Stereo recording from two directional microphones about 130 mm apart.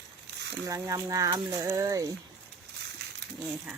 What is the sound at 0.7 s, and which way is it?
Speech, 25° right (ahead or behind).